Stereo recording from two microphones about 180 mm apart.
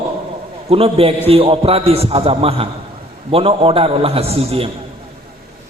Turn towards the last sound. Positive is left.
turn(degrees=-30)  # may be behind; listen again after turning